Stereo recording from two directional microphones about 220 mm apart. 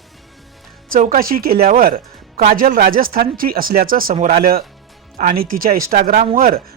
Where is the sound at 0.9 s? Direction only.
40° right (ahead or behind).